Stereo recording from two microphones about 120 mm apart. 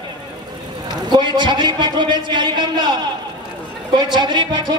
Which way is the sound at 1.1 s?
40° right (ahead or behind).